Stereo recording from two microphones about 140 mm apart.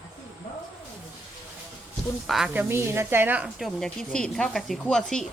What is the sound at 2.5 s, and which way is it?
Speech, 15° right (ahead or behind).